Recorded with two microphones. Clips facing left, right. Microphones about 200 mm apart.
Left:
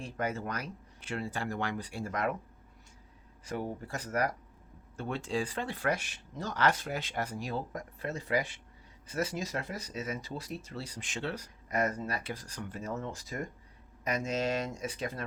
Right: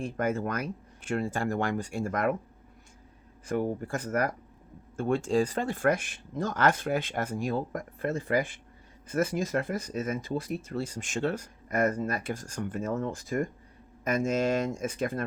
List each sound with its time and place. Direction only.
0.0 s speech: 50° right (ahead or behind)
3.4 s speech: 50° right (ahead or behind)